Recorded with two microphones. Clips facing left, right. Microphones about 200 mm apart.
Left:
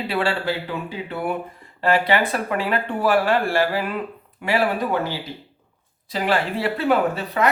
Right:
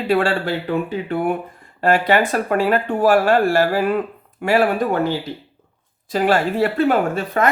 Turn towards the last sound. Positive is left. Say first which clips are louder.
# right 2 dB
turn(degrees=-50)  # may be behind; listen again after turning